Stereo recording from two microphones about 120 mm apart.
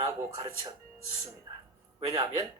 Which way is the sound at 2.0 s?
25° right (ahead or behind).